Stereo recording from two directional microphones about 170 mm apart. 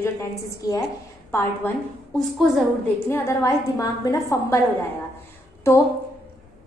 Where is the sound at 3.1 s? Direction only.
15° left (ahead or behind).